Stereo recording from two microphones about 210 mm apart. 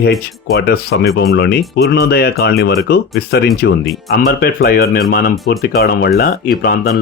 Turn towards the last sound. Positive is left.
turn(degrees=45)  # may be behind; listen again after turning